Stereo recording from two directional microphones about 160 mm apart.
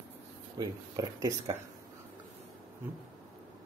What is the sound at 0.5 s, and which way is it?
Speech, 20° right (ahead or behind).